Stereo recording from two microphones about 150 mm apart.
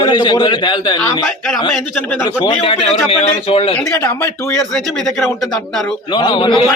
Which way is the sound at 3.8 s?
15° left (ahead or behind).